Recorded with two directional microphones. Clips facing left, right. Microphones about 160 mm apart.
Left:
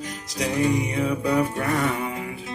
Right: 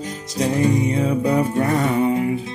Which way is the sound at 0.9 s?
25° right (ahead or behind).